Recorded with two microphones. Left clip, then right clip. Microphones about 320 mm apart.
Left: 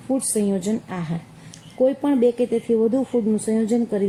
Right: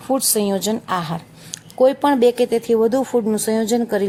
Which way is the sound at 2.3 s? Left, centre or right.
Right.